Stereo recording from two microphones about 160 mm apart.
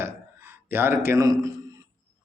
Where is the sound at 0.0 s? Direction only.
15° right (ahead or behind).